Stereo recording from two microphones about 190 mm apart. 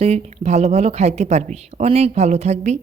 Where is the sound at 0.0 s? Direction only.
35° right (ahead or behind).